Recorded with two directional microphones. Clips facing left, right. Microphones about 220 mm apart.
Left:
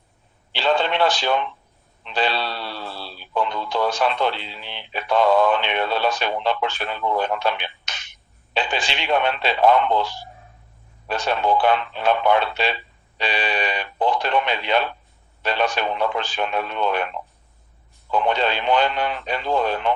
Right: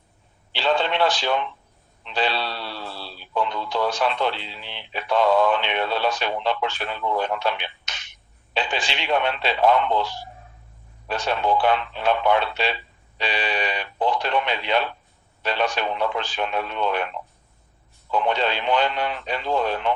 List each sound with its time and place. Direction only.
0.5 s radio: 50° left (ahead or behind)
2.0 s speech: 50° left (ahead or behind)
11.1 s speech: 50° left (ahead or behind)
18.1 s speech: 50° left (ahead or behind)